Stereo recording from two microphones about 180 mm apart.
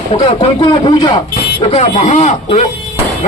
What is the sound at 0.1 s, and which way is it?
Speech, 25° left (ahead or behind).